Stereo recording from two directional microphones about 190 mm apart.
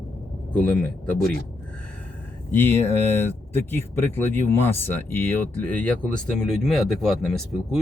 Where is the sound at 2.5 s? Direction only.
10° left (ahead or behind).